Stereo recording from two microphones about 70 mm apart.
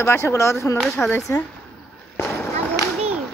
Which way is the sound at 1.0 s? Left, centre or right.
Centre.